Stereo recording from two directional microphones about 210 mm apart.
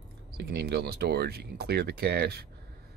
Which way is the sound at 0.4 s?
50° right (ahead or behind).